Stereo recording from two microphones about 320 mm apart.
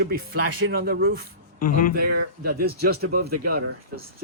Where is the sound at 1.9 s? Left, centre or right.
Right.